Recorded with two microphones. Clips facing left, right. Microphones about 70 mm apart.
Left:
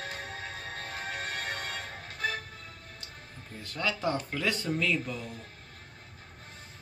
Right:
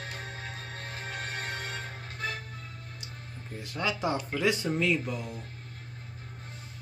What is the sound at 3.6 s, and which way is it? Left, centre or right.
Speech, centre.